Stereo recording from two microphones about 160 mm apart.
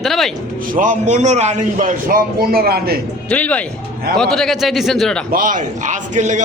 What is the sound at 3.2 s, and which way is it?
Speech, 10° left (ahead or behind).